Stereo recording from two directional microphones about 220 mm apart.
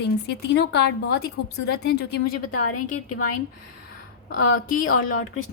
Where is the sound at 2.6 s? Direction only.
90° left.